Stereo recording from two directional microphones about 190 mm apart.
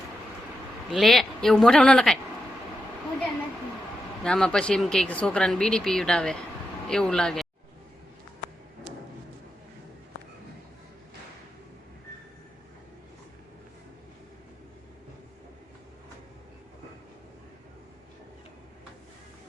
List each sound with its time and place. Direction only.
0.9 s speech: centre (ahead or behind)
4.2 s speech: 5° left (ahead or behind)